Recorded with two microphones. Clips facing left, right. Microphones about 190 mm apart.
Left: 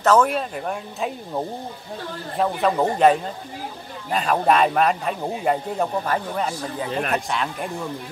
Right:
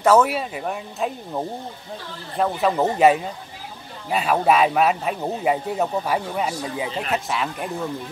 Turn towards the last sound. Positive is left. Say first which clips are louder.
# even
turn(degrees=0)  # may be behind; listen again after turning